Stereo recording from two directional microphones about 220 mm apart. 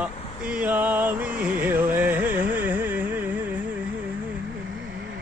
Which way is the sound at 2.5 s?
10° right (ahead or behind).